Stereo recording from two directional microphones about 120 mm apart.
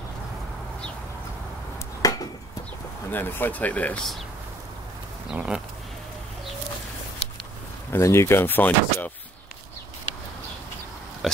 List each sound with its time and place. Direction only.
2.0 s a sound: 30° left (ahead or behind)
3.1 s speech: 15° left (ahead or behind)
5.3 s speech: 10° right (ahead or behind)
7.9 s speech: 25° left (ahead or behind)